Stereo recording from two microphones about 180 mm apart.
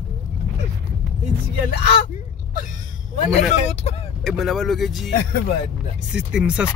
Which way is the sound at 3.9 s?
35° left (ahead or behind).